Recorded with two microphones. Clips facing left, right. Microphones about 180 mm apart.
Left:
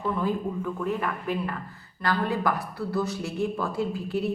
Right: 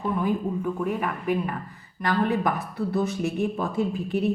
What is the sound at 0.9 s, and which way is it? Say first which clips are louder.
Speech: right 2 dB; 10° right (ahead or behind).